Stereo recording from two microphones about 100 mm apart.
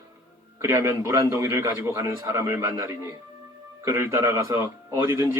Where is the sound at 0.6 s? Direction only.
30° right (ahead or behind).